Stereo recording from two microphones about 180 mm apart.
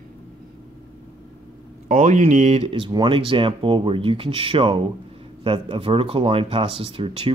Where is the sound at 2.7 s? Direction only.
25° right (ahead or behind).